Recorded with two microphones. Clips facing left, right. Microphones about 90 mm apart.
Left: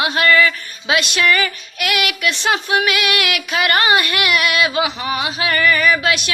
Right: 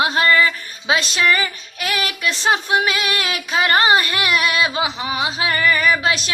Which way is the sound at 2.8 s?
30° right (ahead or behind).